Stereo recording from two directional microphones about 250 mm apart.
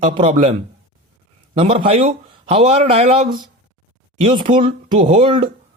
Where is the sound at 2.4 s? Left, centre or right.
Right.